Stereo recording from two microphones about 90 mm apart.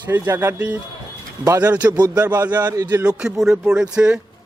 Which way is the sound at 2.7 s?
45° right (ahead or behind).